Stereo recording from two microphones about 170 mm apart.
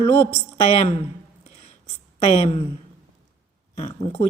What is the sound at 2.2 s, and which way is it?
Speech, 35° left (ahead or behind).